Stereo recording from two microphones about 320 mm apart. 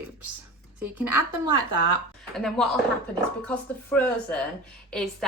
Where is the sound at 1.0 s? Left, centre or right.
Right.